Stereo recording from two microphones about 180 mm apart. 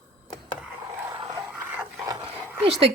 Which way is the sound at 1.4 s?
15° right (ahead or behind).